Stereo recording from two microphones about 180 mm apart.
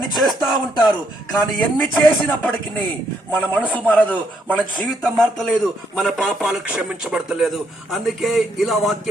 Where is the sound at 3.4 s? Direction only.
10° left (ahead or behind).